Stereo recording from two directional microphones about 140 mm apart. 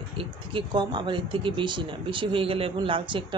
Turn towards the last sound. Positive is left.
turn(degrees=-35)  # may be behind; listen again after turning